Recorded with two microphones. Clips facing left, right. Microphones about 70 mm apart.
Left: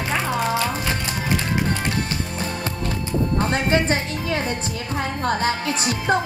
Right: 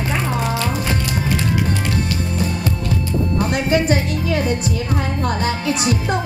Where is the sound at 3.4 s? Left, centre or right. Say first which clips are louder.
Right 3 dB; left.